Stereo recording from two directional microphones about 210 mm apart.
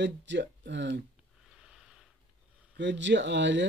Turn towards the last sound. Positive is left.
turn(degrees=-60)  # may be behind; listen again after turning